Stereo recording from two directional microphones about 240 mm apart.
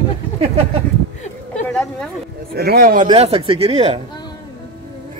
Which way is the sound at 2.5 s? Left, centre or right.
Right.